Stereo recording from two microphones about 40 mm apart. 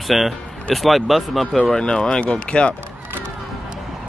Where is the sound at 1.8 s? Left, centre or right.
Left.